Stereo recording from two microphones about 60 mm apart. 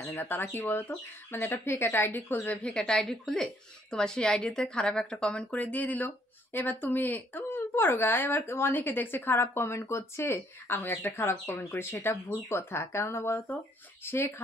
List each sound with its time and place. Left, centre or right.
0.0 s speech: left
2.5 s speech: centre
5.5 s speech: left